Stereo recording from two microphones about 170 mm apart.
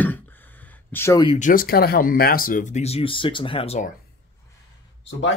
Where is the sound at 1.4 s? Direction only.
55° left (ahead or behind); by 3.9 s 40° left (ahead or behind).